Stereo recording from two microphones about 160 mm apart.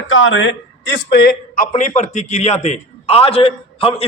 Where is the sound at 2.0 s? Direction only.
45° left (ahead or behind).